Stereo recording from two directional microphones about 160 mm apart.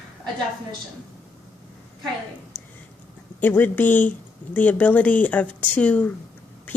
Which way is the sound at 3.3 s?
10° left (ahead or behind).